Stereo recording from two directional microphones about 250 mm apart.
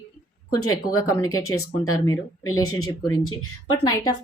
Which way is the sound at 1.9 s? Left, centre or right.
Centre.